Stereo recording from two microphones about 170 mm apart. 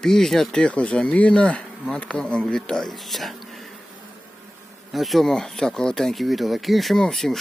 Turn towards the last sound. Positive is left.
turn(degrees=0)  # may be behind; listen again after turning